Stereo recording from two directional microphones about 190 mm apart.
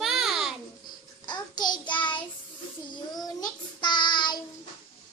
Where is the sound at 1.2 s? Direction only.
25° left (ahead or behind).